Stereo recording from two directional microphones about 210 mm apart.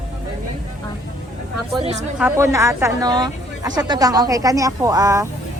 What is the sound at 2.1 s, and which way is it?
A woman's voice, 10° right (ahead or behind).